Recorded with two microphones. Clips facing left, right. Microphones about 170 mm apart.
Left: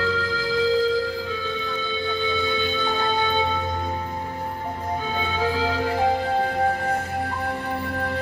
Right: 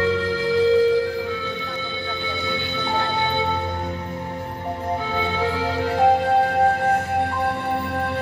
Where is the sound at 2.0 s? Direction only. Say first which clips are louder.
Left 5 dB; 60° right (ahead or behind).